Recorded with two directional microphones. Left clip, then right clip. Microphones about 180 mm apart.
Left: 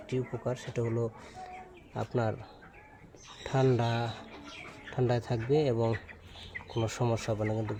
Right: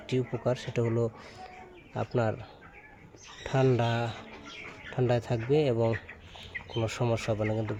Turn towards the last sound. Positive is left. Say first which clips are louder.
# right 2 dB
turn(degrees=-10)  # may be behind; listen again after turning